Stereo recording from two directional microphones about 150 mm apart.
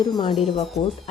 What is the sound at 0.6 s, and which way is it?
Speech, 45° left (ahead or behind).